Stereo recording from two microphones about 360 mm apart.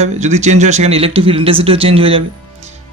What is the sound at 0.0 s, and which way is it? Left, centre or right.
Speech, centre.